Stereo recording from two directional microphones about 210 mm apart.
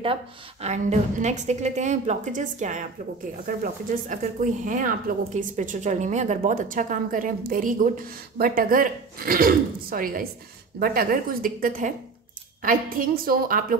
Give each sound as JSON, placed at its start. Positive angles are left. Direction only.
{"t": 0.0, "sound": "a woman's voice", "side_deg": -30}